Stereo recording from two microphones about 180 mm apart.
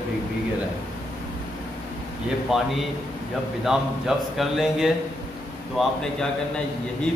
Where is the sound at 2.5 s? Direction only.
5° right (ahead or behind).